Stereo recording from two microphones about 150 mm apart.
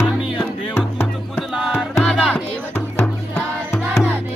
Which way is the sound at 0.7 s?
15° left (ahead or behind).